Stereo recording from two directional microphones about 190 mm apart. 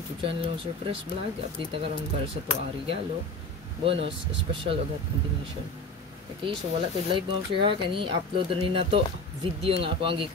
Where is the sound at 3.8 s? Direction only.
30° right (ahead or behind).